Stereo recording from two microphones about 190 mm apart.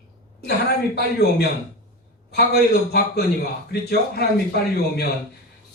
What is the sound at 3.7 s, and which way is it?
Speech, 60° left (ahead or behind).